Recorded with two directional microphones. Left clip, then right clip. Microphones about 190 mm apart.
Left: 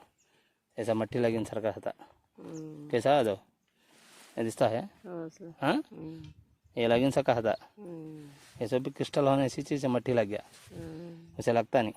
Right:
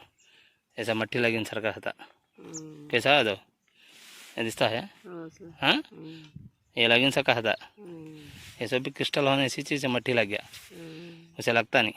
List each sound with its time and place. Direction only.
0.8 s speech: 10° left (ahead or behind)
5.0 s speech: 35° left (ahead or behind)
5.5 s speech: 15° left (ahead or behind)